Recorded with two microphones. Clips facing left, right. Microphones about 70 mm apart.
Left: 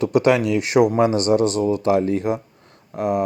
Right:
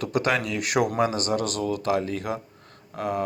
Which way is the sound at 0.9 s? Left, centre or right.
Left.